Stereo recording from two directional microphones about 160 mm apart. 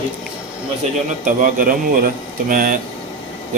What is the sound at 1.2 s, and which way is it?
A man's voice, 60° right (ahead or behind).